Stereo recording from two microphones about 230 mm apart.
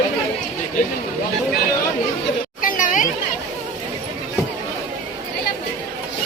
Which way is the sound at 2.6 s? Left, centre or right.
Left.